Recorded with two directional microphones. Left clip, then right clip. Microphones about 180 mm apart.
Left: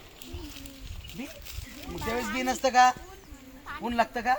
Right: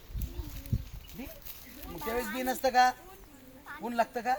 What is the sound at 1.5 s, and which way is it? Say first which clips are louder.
Speech: left 5 dB; centre (ahead or behind).